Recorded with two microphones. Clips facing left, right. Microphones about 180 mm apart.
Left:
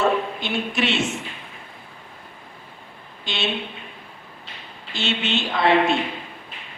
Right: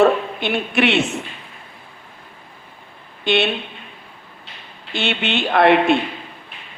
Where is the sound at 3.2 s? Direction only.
60° right (ahead or behind).